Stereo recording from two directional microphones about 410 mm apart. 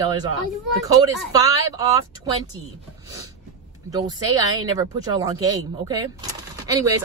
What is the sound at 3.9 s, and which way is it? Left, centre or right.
Speech, centre.